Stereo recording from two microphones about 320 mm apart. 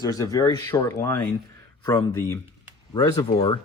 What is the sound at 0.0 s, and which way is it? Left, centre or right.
Speech, centre.